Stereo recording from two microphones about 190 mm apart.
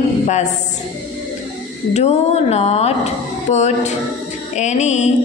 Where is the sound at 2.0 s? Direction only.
35° left (ahead or behind).